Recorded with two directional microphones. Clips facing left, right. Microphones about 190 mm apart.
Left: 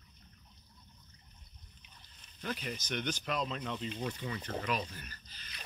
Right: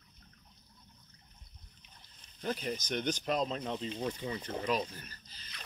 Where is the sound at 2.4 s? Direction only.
40° right (ahead or behind).